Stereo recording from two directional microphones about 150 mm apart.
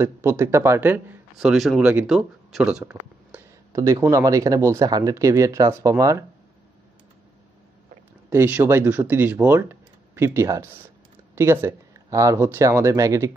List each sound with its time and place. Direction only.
0.0 s a man's voice: 15° right (ahead or behind)
2.9 s a sound: 10° right (ahead or behind)
3.7 s speech: 20° right (ahead or behind)
8.3 s a man's voice: 15° right (ahead or behind)